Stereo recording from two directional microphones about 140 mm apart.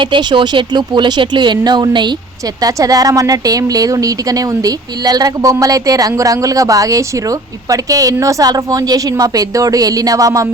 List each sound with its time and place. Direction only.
0.0 s speech: 35° right (ahead or behind)